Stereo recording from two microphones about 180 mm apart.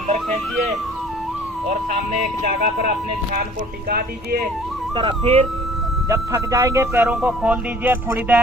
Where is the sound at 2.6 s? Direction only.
55° right (ahead or behind).